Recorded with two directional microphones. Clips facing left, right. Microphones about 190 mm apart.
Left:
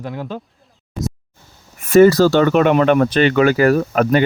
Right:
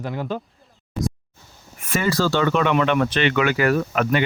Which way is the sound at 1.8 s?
40° left (ahead or behind).